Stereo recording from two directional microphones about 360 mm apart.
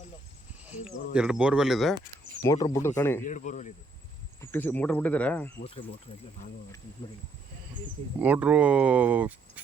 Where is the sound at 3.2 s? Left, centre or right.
Left.